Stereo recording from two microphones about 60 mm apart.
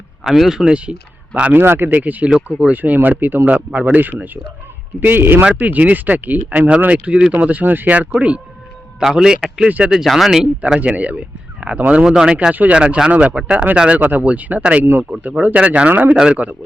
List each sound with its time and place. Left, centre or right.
0.3 s speech: centre
0.6 s speech: centre
1.5 s speech: right
2.3 s speech: centre
2.6 s speech: right
9.0 s speech: centre
9.6 s speech: right
10.1 s speech: centre
10.8 s speech: right
12.0 s speech: centre
12.5 s speech: right